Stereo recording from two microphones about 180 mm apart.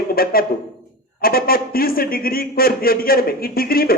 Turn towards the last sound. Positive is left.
turn(degrees=55)  # may be behind; listen again after turning